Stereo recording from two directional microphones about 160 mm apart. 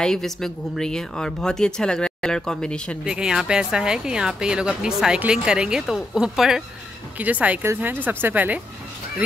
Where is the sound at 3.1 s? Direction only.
5° right (ahead or behind).